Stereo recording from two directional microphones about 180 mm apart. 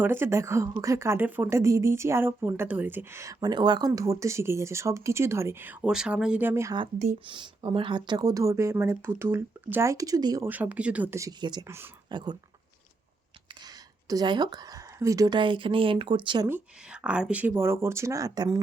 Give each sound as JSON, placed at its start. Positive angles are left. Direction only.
{"t": 0.0, "sound": "a woman's voice", "side_deg": -10}
{"t": 7.0, "sound": "speech", "side_deg": -40}
{"t": 7.3, "sound": "speech", "side_deg": -25}
{"t": 10.5, "sound": "a woman's voice", "side_deg": -10}
{"t": 13.7, "sound": "a woman's voice", "side_deg": -20}
{"t": 16.5, "sound": "a woman's voice", "side_deg": -5}